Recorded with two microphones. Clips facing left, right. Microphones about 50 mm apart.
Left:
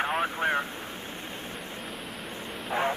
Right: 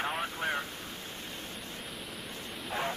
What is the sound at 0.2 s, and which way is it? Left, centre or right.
Vehicle, left.